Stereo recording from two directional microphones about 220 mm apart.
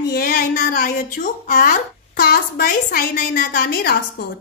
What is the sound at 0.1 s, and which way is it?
Speech, 45° left (ahead or behind).